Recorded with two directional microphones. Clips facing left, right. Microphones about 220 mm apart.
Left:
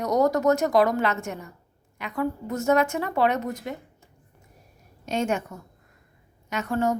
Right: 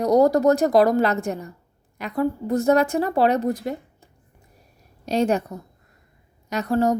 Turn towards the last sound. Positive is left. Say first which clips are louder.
# right 4 dB
turn(degrees=-35)  # may be behind; listen again after turning